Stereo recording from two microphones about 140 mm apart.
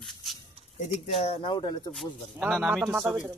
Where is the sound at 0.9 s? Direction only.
45° left (ahead or behind); by 1.8 s 30° left (ahead or behind).